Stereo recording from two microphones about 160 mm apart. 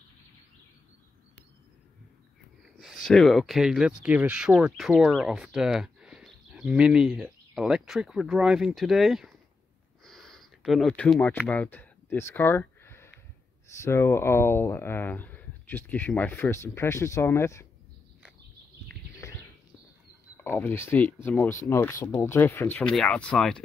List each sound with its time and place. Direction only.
2.8 s speech: centre (ahead or behind)
10.0 s a sound: centre (ahead or behind)
13.7 s speech: 15° left (ahead or behind)
20.3 s speech: 15° left (ahead or behind)